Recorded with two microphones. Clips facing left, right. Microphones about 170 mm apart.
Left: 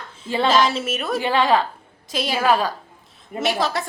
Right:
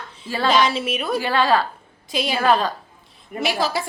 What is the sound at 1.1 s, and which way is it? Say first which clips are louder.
Speech: left 1 dB; 20° left (ahead or behind).